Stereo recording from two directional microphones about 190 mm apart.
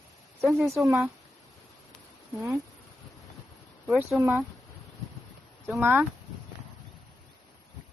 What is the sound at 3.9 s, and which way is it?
Speech, 5° right (ahead or behind).